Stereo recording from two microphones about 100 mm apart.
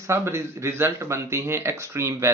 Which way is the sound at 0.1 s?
25° right (ahead or behind).